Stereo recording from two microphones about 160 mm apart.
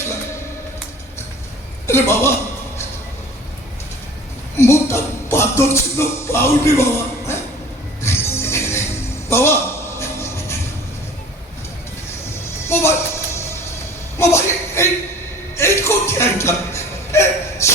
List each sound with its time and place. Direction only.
1.9 s speech: 15° left (ahead or behind)
4.5 s tambourine: 15° left (ahead or behind)
8.0 s music: 15° left (ahead or behind)
9.3 s a sound: 15° left (ahead or behind)
12.6 s music: 15° left (ahead or behind)
14.2 s a sound: 15° left (ahead or behind)